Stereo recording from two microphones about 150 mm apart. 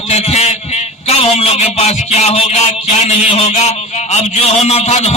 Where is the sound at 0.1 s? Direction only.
45° left (ahead or behind).